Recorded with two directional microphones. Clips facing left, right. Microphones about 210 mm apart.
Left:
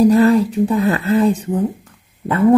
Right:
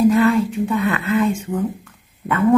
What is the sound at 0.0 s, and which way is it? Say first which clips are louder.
A woman's voice: left 3 dB; 40° left (ahead or behind).